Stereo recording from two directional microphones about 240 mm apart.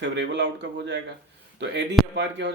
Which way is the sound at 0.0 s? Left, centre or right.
Right.